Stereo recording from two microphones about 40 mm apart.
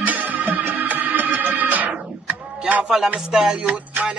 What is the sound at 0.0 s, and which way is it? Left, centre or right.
Music, right.